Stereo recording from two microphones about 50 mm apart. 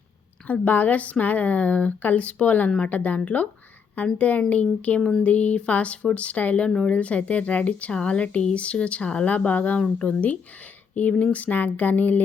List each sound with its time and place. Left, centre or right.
0.4 s a woman's voice: left